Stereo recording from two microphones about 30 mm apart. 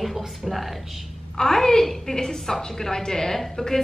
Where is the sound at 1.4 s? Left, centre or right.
Centre.